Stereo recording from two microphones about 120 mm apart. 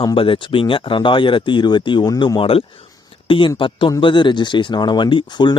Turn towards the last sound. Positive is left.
turn(degrees=40)  # may be behind; listen again after turning